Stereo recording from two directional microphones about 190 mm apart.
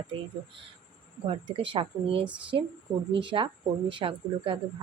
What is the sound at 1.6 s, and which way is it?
A woman's voice, 30° right (ahead or behind).